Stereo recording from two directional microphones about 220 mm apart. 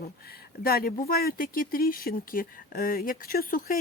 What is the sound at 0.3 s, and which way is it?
A woman's voice, 45° left (ahead or behind).